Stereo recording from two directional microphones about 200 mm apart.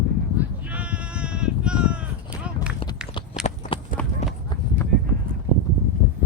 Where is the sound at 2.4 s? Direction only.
5° right (ahead or behind).